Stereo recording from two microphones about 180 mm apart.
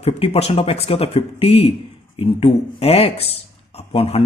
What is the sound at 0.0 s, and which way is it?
A man's voice, 35° left (ahead or behind).